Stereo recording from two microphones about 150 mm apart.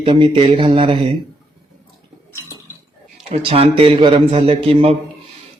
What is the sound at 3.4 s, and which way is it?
Speech, 40° right (ahead or behind).